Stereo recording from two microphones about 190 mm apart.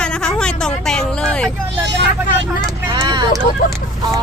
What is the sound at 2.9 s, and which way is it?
Vehicle, 20° right (ahead or behind).